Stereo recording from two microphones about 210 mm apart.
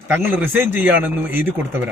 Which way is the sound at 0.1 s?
10° right (ahead or behind).